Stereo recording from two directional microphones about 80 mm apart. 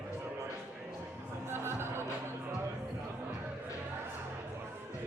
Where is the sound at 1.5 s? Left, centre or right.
Right.